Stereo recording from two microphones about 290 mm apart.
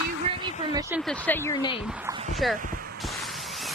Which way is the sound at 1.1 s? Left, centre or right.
Centre.